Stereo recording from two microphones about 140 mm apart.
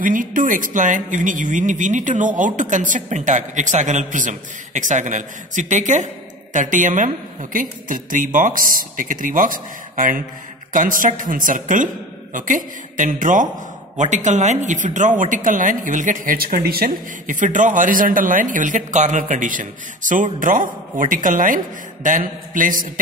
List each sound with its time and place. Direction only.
0.0 s a woman's voice: 70° right (ahead or behind)
13.9 s speech: 55° right (ahead or behind); by 22.8 s 75° right (ahead or behind)